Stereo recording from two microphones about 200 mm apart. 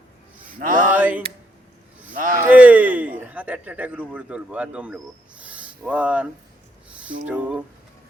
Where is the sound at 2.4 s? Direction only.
10° right (ahead or behind).